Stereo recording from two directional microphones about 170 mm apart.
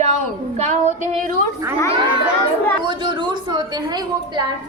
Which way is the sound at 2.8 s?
30° right (ahead or behind).